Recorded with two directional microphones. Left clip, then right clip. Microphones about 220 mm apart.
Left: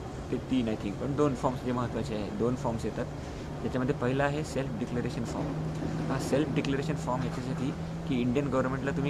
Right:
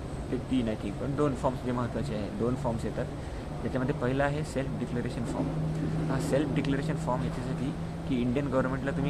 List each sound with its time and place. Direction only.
0.5 s speech: 15° left (ahead or behind)
3.7 s speech: 15° left (ahead or behind)
6.2 s speech: 15° left (ahead or behind)
8.1 s speech: 15° left (ahead or behind)